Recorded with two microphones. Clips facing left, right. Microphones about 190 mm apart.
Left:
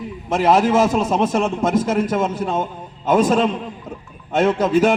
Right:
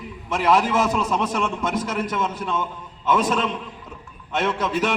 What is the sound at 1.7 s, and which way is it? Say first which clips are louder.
Speech: left 7 dB; 30° left (ahead or behind).